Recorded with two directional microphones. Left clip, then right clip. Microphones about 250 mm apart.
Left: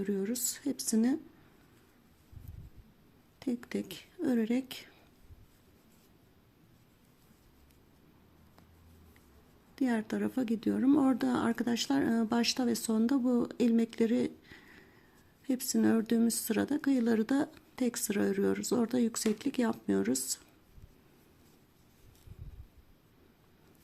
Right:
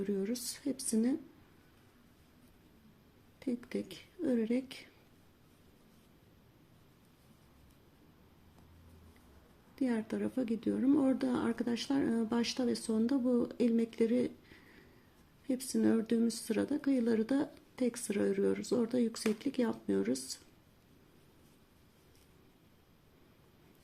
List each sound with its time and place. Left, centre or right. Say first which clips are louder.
0.0 s speech: left 2 dB; centre
3.4 s speech: left 2 dB; centre
9.7 s speech: left 3 dB; centre